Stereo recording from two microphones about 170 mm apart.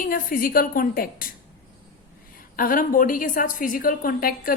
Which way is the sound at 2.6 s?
55° left (ahead or behind).